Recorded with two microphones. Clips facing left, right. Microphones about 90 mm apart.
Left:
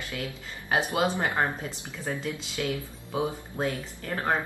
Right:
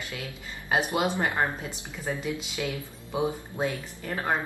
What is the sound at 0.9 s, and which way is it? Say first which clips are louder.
A woman's voice: even; 15° right (ahead or behind).